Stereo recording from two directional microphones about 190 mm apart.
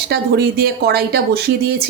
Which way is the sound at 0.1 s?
55° right (ahead or behind).